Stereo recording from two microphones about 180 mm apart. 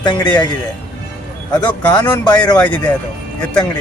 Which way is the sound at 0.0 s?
25° left (ahead or behind).